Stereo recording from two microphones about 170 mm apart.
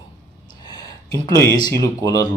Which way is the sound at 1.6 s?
20° left (ahead or behind).